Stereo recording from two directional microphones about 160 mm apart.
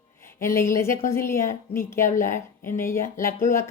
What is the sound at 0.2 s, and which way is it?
Speech, 15° left (ahead or behind).